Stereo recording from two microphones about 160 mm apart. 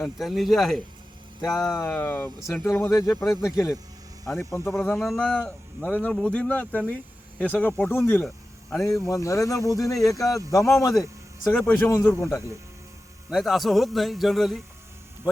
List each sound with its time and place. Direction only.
0.0 s a man's voice: centre (ahead or behind)
1.7 s speech: 15° left (ahead or behind)
4.9 s speech: centre (ahead or behind); by 12.4 s 20° left (ahead or behind)
13.3 s a man's voice: centre (ahead or behind)